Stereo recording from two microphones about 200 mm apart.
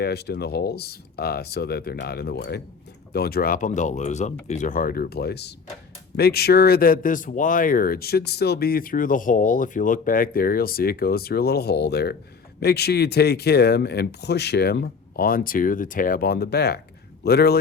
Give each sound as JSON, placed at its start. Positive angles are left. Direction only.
{"t": 0.0, "sound": "speech", "side_deg": 55}